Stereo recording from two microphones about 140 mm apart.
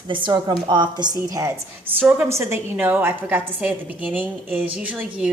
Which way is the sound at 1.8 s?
15° right (ahead or behind).